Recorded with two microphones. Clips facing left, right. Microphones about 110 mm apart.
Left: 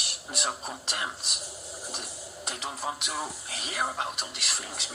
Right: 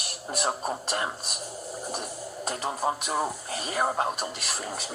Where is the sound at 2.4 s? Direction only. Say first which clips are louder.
Right 6 dB; 45° right (ahead or behind).